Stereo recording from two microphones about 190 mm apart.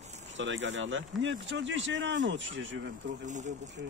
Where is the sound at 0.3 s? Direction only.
80° right.